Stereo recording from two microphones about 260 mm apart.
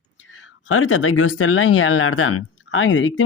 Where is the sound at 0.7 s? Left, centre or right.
Left.